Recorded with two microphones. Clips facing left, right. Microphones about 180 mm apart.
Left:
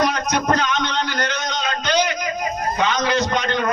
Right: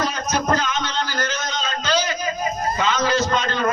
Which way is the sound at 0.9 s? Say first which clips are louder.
Left 2 dB; 65° left (ahead or behind).